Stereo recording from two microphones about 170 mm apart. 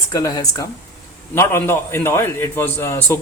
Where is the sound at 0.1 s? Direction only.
20° left (ahead or behind).